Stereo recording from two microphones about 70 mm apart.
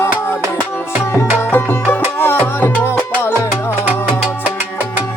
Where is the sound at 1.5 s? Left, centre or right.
Left.